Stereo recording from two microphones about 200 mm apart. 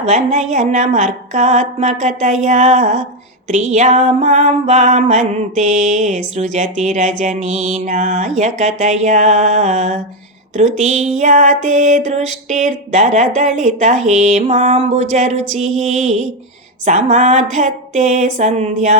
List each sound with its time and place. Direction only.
0.0 s music: 35° right (ahead or behind)